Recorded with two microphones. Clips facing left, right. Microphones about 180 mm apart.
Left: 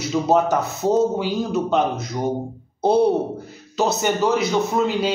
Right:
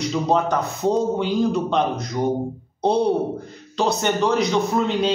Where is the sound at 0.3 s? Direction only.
5° left (ahead or behind).